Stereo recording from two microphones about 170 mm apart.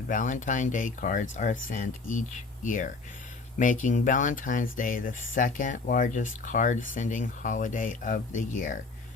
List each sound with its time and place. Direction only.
0.1 s speech: 50° left (ahead or behind)